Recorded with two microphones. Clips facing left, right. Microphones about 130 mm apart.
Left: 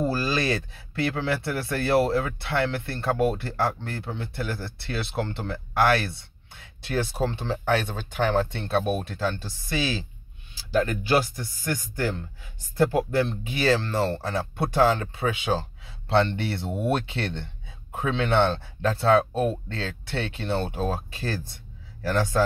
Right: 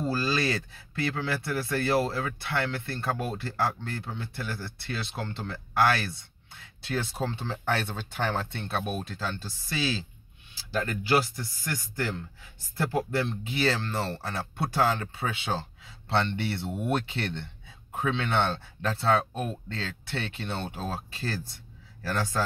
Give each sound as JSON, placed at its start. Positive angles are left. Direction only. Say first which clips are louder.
{"t": 0.0, "sound": "speech", "louder": "left 3 dB", "side_deg": 20}
{"t": 5.5, "sound": "speech", "louder": "left 2 dB", "side_deg": 25}